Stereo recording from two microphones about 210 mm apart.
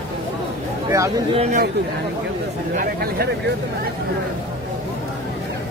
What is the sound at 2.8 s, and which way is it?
Speech, 45° right (ahead or behind).